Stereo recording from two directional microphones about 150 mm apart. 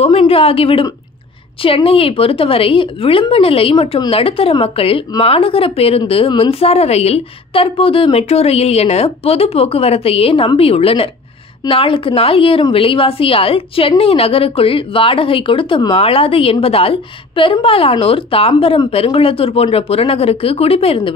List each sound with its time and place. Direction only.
0.0 s a woman's voice: 40° left (ahead or behind)